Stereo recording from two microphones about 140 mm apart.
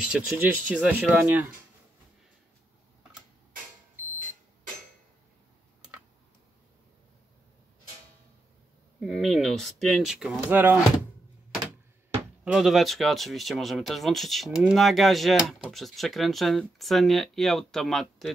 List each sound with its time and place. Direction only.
0.1 s speech: 10° right (ahead or behind)
9.0 s speech: centre (ahead or behind)
10.5 s speech: 15° right (ahead or behind)
12.4 s speech: centre (ahead or behind)